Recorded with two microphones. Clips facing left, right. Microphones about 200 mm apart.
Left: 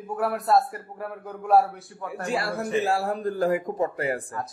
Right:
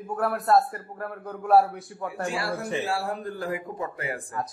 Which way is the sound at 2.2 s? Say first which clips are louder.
Left 3 dB; 40° left (ahead or behind).